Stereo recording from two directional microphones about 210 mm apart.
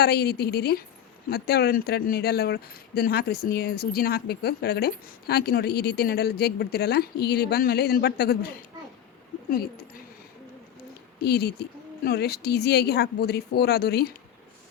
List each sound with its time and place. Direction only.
0.0 s speech: 50° left (ahead or behind)
11.2 s speech: 50° left (ahead or behind)